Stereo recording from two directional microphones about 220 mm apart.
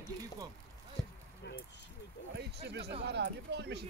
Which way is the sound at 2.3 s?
50° right (ahead or behind).